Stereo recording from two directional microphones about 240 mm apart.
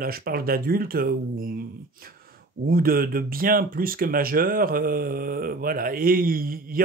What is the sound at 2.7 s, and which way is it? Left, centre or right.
Speech, right.